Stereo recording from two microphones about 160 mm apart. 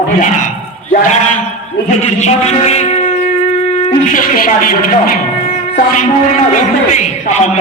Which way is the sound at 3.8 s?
55° left (ahead or behind).